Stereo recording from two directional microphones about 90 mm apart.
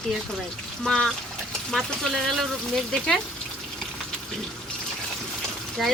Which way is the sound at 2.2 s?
Centre (ahead or behind).